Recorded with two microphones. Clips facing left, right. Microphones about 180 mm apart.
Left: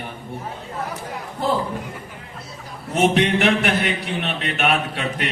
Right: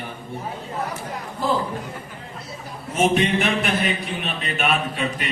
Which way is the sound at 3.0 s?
70° left (ahead or behind).